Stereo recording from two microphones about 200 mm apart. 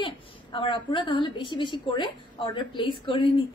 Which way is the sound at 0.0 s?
25° left (ahead or behind).